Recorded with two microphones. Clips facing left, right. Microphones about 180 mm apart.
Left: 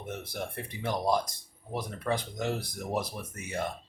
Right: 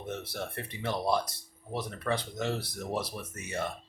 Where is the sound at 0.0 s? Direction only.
10° left (ahead or behind).